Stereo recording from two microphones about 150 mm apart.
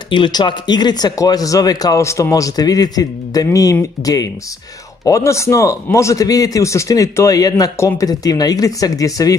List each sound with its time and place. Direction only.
0.1 s a man's voice: 30° left (ahead or behind)